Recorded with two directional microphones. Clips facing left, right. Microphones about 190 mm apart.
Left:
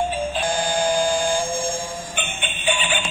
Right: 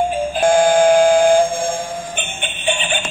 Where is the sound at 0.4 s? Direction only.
50° right (ahead or behind).